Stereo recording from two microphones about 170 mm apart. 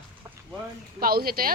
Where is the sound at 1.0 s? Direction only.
60° right (ahead or behind).